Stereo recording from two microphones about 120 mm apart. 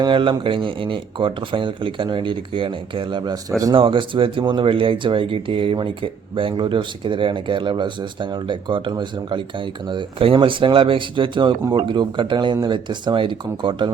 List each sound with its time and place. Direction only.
0.0 s speech: 45° right (ahead or behind)